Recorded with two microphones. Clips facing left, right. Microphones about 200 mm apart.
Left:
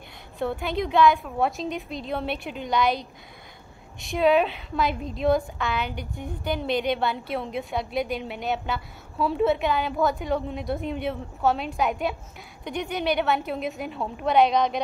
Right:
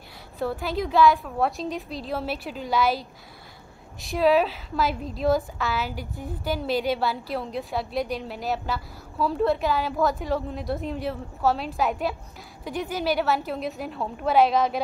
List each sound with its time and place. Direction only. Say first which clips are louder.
0.4 s a woman's voice: even; centre (ahead or behind)